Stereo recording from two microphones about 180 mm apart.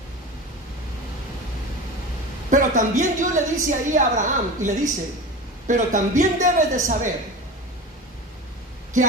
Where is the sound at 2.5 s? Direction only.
45° right (ahead or behind).